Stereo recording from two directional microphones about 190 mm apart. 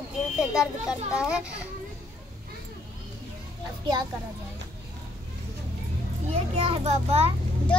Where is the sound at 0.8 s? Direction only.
5° right (ahead or behind).